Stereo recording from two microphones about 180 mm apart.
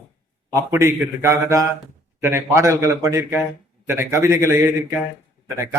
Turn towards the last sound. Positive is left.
turn(degrees=-15)  # may be behind; listen again after turning